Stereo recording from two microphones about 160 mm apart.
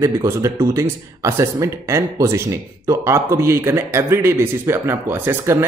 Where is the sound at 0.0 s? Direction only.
20° right (ahead or behind).